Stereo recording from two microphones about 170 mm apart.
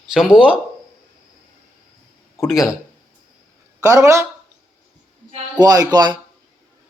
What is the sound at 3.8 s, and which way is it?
Speech, 20° right (ahead or behind).